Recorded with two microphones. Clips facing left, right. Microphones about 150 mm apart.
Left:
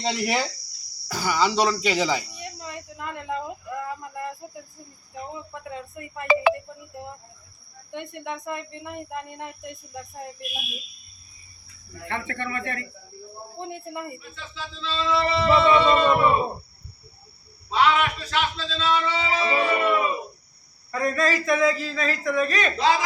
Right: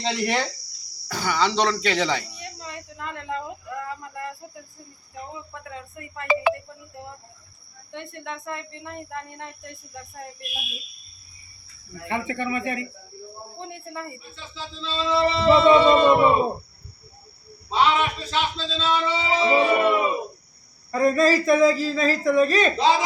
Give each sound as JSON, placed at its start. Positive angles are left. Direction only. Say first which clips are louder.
{"t": 0.0, "sound": "speech", "louder": "right 1 dB", "side_deg": 5}
{"t": 5.6, "sound": "speech", "louder": "left 3 dB", "side_deg": 20}
{"t": 6.2, "sound": "speech", "louder": "left 2 dB", "side_deg": 90}
{"t": 7.9, "sound": "speech", "louder": "left 2 dB", "side_deg": 15}
{"t": 11.9, "sound": "speech", "louder": "right 4 dB", "side_deg": -10}
{"t": 13.6, "sound": "speech", "louder": "left 2 dB", "side_deg": 15}
{"t": 14.3, "sound": "a man's voice", "louder": "even", "side_deg": -30}
{"t": 17.7, "sound": "a man's voice", "louder": "even", "side_deg": -25}